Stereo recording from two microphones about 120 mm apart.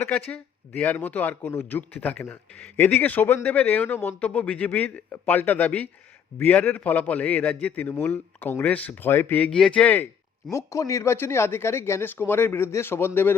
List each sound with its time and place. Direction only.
0.0 s a man's voice: 10° left (ahead or behind)
9.5 s a man's voice: 5° left (ahead or behind)
10.5 s speech: 25° left (ahead or behind)